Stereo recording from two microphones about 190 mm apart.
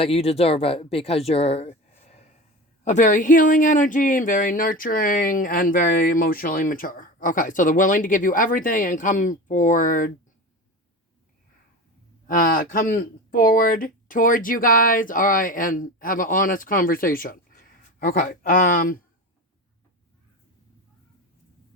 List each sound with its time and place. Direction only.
0.0 s speech: 30° left (ahead or behind)
12.3 s speech: 45° left (ahead or behind)